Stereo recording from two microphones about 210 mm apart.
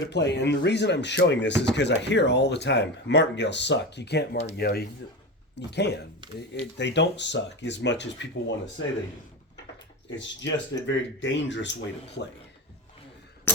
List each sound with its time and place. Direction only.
0.0 s speech: 55° left (ahead or behind)
10.2 s speech: 60° left (ahead or behind)